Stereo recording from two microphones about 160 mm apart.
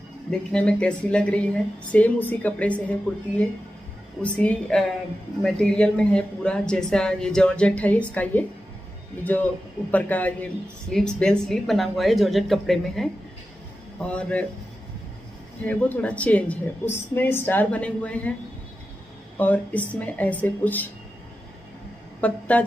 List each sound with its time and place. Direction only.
0.5 s a woman's voice: 5° left (ahead or behind)
15.6 s a woman's voice: 10° left (ahead or behind)
19.3 s a woman's voice: 10° left (ahead or behind)
22.2 s a woman's voice: 10° left (ahead or behind)